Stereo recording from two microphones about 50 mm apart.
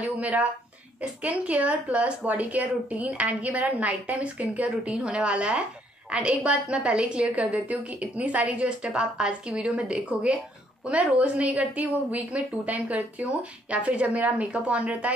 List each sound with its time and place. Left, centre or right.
0.2 s a woman's voice: right
4.9 s a woman's voice: centre